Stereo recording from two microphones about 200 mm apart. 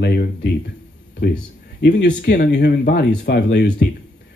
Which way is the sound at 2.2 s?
55° left (ahead or behind).